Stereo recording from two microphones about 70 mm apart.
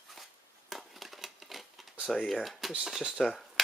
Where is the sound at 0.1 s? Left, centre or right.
Centre.